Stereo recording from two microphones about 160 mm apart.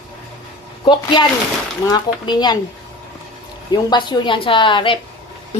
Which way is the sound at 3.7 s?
25° left (ahead or behind).